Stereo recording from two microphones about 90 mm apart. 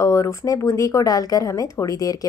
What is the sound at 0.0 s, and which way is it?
A woman's voice, 35° left (ahead or behind).